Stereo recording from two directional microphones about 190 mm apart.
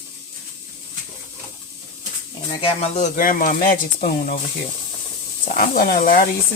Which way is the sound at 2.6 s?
30° left (ahead or behind).